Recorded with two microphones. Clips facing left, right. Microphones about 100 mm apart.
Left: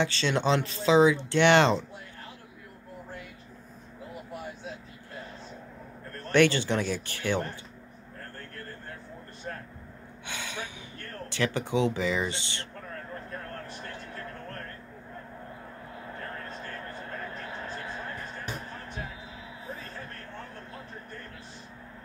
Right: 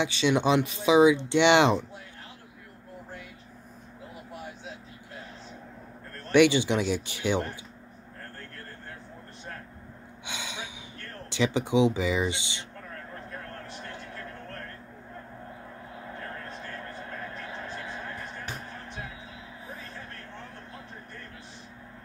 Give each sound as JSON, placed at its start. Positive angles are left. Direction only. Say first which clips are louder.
{"t": 0.0, "sound": "speech", "louder": "right 2 dB", "side_deg": -15}
{"t": 6.3, "sound": "speech", "louder": "right 2 dB", "side_deg": -15}
{"t": 10.2, "sound": "gasp", "louder": "left 1 dB", "side_deg": -15}
{"t": 11.2, "sound": "speech", "louder": "right 3 dB", "side_deg": -15}